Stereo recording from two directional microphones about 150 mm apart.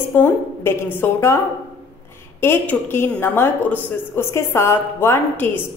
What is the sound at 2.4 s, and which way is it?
A woman's voice, 15° left (ahead or behind).